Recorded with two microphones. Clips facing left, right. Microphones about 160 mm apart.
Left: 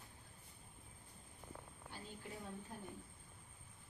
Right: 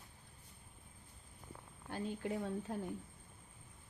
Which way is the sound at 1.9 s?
80° right.